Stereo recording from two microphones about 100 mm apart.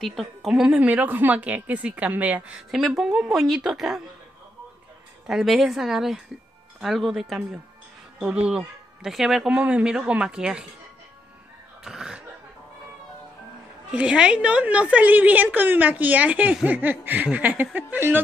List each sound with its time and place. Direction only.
0.0 s a woman's voice: centre (ahead or behind)
5.2 s a woman's voice: 5° right (ahead or behind)
11.8 s a woman's voice: 5° right (ahead or behind)
13.8 s a woman's voice: 10° right (ahead or behind)